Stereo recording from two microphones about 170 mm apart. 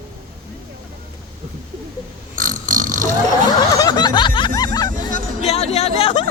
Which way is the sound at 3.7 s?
25° left (ahead or behind).